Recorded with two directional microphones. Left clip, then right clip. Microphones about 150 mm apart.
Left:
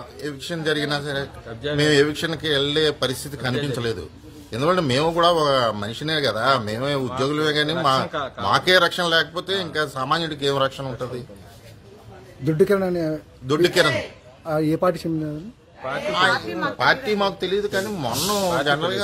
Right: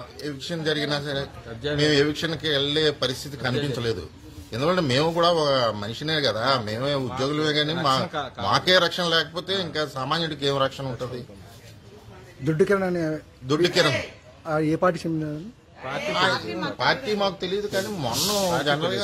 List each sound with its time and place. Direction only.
0.2 s a man's voice: 10° left (ahead or behind)
8.1 s speech: 40° right (ahead or behind)
8.5 s a man's voice: 10° left (ahead or behind)
12.4 s a man's voice: centre (ahead or behind)
16.1 s a man's voice: 10° left (ahead or behind)
16.3 s speech: 30° left (ahead or behind)
16.7 s a man's voice: 15° left (ahead or behind)